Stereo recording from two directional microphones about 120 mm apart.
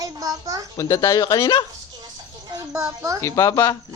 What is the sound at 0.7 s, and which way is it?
Speech, 30° left (ahead or behind).